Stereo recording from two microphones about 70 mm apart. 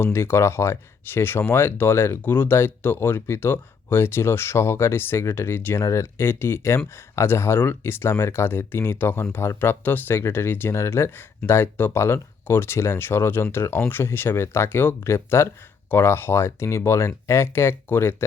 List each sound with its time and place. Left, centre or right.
0.0 s speech: left